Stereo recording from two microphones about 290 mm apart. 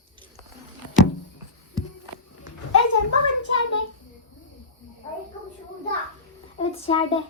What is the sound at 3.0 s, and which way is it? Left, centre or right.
Speech, left.